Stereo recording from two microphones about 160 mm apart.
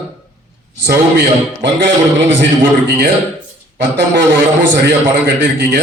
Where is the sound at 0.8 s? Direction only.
90° right.